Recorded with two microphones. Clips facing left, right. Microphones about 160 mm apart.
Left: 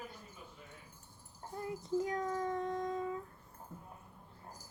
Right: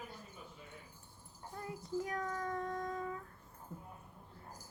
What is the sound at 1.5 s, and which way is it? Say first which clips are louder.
Child singing: left 4 dB; 25° left (ahead or behind).